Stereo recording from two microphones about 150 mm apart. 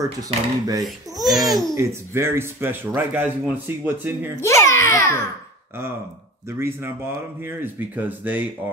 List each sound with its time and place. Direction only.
0.0 s speech: 25° right (ahead or behind)
0.8 s speech: centre (ahead or behind)
1.8 s speech: 15° right (ahead or behind)
4.4 s babbling: 20° left (ahead or behind)
6.5 s speech: 15° right (ahead or behind)